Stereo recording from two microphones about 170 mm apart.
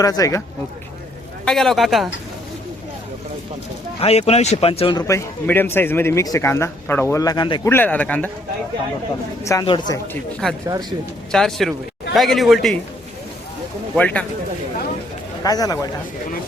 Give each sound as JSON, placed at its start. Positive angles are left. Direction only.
{"t": 0.0, "sound": "a man's voice", "side_deg": 20}
{"t": 1.5, "sound": "a man's voice", "side_deg": 0}
{"t": 4.0, "sound": "speech", "side_deg": 40}
{"t": 5.0, "sound": "speech", "side_deg": 15}
{"t": 7.7, "sound": "speech", "side_deg": 10}
{"t": 9.4, "sound": "a man's voice", "side_deg": 20}
{"t": 10.7, "sound": "speech", "side_deg": -25}
{"t": 11.3, "sound": "a man's voice", "side_deg": 0}
{"t": 13.9, "sound": "speech", "side_deg": 5}
{"t": 15.4, "sound": "a man's voice", "side_deg": 20}